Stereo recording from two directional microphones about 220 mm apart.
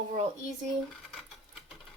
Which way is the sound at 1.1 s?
Centre (ahead or behind).